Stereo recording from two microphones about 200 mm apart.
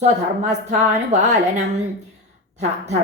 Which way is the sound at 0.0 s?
35° right (ahead or behind).